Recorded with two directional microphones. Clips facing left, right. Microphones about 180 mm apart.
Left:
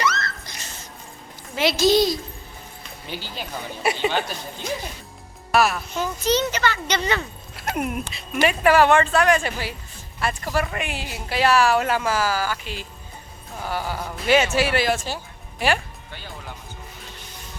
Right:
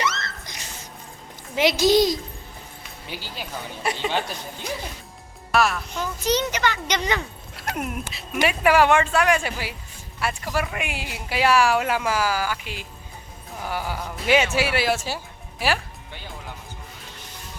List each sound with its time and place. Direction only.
0.0 s a sound: 25° right (ahead or behind)
1.5 s speech: 15° right (ahead or behind)
3.8 s speech: 10° left (ahead or behind)
5.5 s speech: 5° left (ahead or behind)
6.2 s speech: 15° right (ahead or behind)
7.5 s speech: centre (ahead or behind)
8.4 s speech: 10° right (ahead or behind)